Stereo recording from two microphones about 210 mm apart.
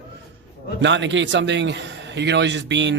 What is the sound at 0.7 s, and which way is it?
Speech, 60° right (ahead or behind).